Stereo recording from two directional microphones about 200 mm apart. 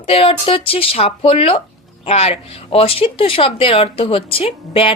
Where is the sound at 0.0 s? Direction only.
30° left (ahead or behind).